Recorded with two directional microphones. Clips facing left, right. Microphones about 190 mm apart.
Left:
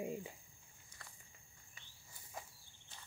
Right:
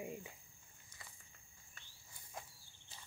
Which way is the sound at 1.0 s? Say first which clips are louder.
Even; 5° right (ahead or behind).